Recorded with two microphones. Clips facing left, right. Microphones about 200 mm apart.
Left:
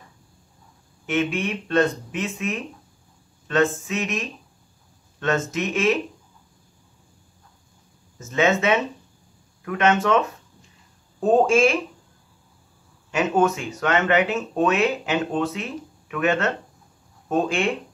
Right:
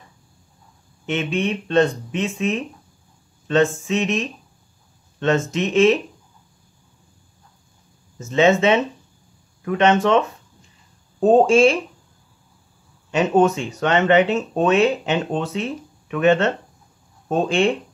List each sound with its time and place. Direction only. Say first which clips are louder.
1.0 s speech: right 1 dB; 25° right (ahead or behind)
3.8 s speech: right 5 dB; 25° right (ahead or behind)
5.5 s speech: right 6 dB; 25° right (ahead or behind)
8.3 s speech: right 4 dB; 30° right (ahead or behind)
13.1 s speech: right 4 dB; 30° right (ahead or behind)